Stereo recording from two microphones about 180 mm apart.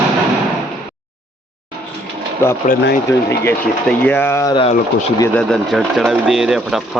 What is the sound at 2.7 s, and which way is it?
Speech, 50° left (ahead or behind).